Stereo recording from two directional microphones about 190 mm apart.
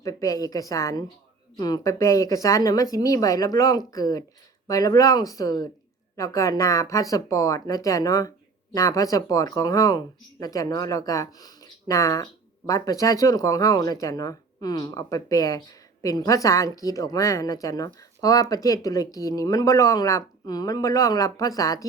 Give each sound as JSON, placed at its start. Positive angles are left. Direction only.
{"t": 0.0, "sound": "a woman's voice", "side_deg": 20}